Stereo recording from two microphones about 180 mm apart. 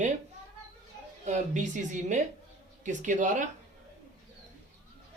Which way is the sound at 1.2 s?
40° right (ahead or behind).